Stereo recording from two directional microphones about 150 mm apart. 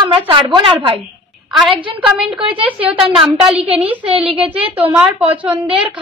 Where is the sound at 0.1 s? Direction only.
35° right (ahead or behind).